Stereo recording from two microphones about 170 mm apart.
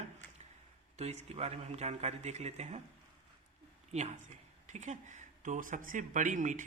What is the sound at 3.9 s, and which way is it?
Speech, 40° right (ahead or behind).